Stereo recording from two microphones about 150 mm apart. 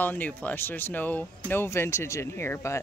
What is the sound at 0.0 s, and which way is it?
Speech, 10° left (ahead or behind).